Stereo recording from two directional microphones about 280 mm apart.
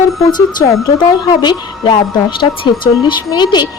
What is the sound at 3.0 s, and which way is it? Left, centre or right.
Speech, centre.